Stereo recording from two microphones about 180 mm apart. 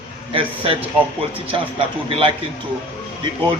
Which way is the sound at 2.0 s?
30° right (ahead or behind).